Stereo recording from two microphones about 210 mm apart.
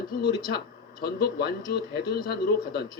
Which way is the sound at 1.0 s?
45° left (ahead or behind).